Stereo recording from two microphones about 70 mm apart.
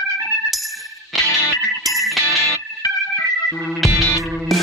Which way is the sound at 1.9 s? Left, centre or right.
Centre.